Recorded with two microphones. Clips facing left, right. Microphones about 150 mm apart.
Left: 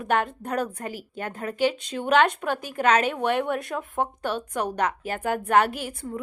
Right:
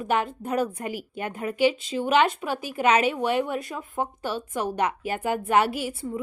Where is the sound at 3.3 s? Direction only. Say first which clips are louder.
Even; 55° left (ahead or behind).